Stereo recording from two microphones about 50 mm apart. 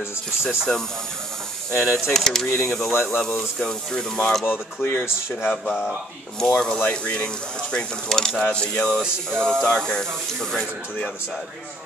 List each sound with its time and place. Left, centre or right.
0.4 s speech: centre
1.8 s speech: centre
2.9 s speech: left
3.5 s speech: centre
4.5 s speech: left
5.5 s speech: centre
6.9 s speech: left
7.7 s speech: centre
8.5 s speech: left
9.3 s speech: centre